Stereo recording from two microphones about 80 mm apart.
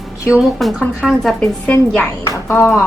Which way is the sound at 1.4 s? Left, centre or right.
Centre.